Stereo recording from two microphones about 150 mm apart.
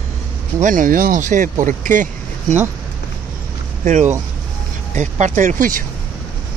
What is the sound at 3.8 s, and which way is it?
Speech, 55° right (ahead or behind).